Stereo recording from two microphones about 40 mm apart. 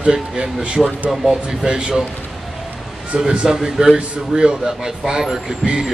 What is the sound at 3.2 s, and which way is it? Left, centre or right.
Speech, centre.